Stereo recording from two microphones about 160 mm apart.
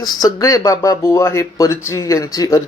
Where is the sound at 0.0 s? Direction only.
25° left (ahead or behind).